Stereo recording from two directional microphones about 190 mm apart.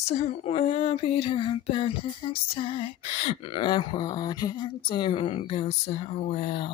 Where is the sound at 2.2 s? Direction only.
25° left (ahead or behind).